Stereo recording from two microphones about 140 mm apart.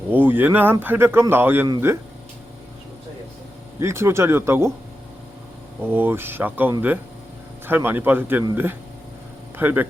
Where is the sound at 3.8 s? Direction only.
20° right (ahead or behind).